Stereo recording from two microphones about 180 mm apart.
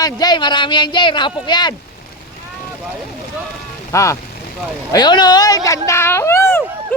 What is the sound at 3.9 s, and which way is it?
Speech, 15° left (ahead or behind).